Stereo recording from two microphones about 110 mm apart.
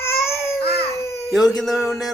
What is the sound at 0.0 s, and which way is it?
Baby cry, 25° left (ahead or behind).